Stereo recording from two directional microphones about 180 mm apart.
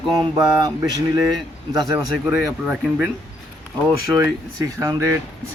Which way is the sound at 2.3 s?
5° right (ahead or behind).